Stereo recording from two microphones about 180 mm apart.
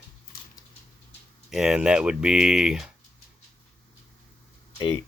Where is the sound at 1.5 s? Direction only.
5° right (ahead or behind).